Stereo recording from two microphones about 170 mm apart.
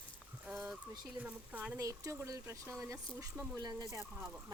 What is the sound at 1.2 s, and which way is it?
A woman's voice, 10° right (ahead or behind).